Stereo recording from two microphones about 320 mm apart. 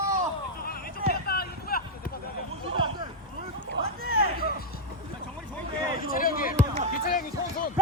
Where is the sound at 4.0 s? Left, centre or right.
Right.